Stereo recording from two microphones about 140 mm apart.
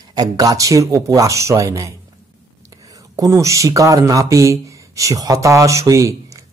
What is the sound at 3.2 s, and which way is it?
Speech, 20° right (ahead or behind).